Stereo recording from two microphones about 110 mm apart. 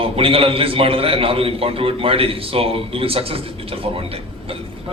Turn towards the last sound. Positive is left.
turn(degrees=-60)  # may be behind; listen again after turning